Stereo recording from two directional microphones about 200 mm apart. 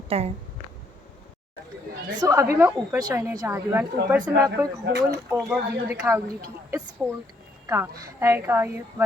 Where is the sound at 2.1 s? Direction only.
20° right (ahead or behind).